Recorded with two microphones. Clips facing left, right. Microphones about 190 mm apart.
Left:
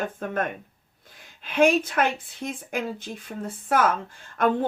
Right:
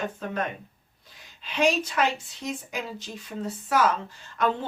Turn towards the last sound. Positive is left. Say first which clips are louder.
# left 3 dB
turn(degrees=50)  # may be behind; listen again after turning